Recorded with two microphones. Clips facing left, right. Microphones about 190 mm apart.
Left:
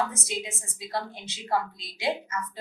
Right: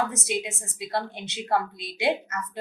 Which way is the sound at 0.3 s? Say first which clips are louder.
Right 5 dB; 60° right (ahead or behind).